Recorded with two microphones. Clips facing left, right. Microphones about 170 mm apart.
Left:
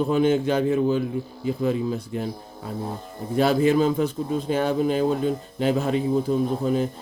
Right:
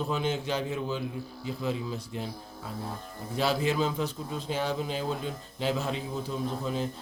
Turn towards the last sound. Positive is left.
turn(degrees=50)  # may be behind; listen again after turning